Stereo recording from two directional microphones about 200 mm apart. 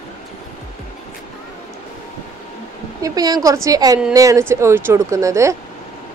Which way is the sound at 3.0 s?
20° right (ahead or behind).